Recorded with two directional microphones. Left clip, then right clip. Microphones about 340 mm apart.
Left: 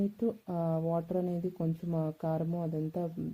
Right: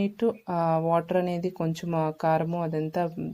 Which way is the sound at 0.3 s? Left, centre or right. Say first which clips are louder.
Right 11 dB; right.